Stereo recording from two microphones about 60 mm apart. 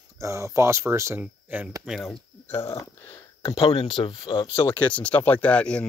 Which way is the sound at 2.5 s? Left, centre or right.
Left.